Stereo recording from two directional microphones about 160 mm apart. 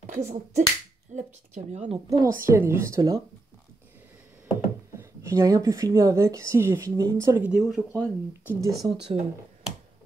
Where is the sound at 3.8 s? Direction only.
10° right (ahead or behind).